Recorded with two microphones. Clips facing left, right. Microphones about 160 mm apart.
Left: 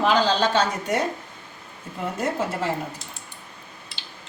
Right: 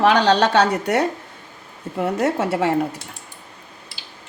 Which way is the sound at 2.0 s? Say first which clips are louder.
Right 5 dB; 70° right (ahead or behind).